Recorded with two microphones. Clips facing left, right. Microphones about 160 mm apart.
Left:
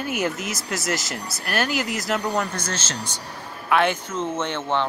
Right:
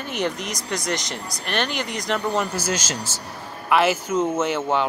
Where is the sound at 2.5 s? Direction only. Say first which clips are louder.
Right 4 dB; 10° right (ahead or behind).